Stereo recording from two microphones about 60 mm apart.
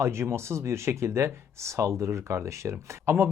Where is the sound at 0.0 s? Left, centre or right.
Right.